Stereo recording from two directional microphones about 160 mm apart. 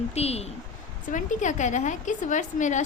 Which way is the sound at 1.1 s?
50° left (ahead or behind).